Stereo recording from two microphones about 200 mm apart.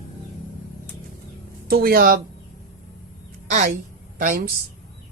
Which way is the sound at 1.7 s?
50° right (ahead or behind).